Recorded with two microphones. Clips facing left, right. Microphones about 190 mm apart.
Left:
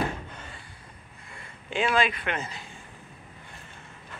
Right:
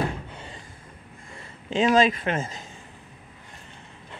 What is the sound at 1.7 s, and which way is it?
Speech, 40° right (ahead or behind).